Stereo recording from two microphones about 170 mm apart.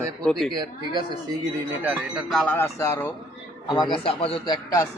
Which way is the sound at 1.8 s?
Centre (ahead or behind).